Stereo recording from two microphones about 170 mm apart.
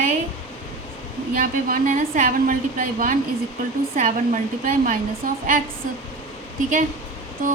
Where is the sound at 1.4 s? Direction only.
55° right (ahead or behind).